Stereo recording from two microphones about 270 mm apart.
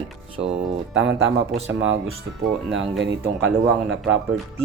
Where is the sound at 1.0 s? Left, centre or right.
Right.